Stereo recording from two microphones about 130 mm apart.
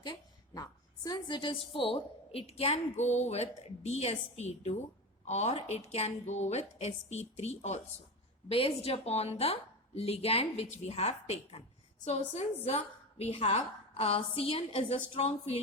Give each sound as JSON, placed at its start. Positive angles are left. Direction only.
{"t": 0.0, "sound": "a woman's voice", "side_deg": 35}
{"t": 8.4, "sound": "a woman's voice", "side_deg": 45}